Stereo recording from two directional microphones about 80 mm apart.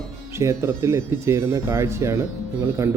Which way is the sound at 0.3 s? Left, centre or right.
Right.